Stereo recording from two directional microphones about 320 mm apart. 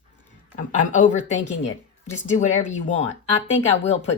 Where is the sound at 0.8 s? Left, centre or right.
Left.